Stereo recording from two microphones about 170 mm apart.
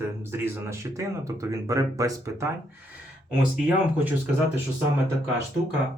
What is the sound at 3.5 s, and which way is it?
Speech, 10° right (ahead or behind).